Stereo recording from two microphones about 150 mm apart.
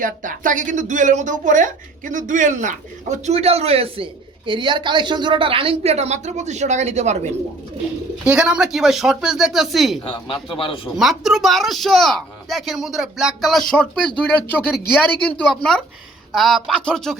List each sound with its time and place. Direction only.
0.0 s speech: 60° right (ahead or behind)
8.2 s speech: 5° right (ahead or behind)